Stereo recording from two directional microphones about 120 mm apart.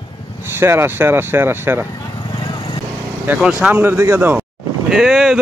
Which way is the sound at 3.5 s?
20° right (ahead or behind).